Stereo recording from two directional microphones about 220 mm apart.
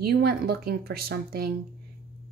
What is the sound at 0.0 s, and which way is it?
A woman's voice, 45° right (ahead or behind).